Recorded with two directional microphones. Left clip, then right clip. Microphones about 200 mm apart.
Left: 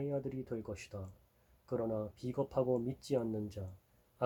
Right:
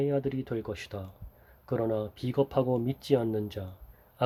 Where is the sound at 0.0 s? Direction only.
45° right (ahead or behind).